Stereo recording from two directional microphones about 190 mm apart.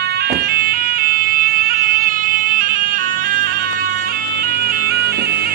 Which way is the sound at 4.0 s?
50° right (ahead or behind).